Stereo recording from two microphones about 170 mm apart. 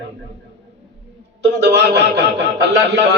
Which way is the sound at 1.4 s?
80° right.